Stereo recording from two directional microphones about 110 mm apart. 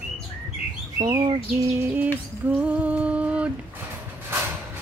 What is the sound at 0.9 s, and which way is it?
Bird, 35° right (ahead or behind).